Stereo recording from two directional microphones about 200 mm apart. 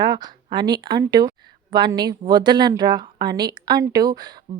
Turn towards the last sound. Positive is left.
turn(degrees=-20)  # may be behind; listen again after turning